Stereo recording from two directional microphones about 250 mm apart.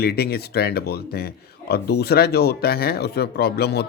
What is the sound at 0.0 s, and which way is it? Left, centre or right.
Speech, left.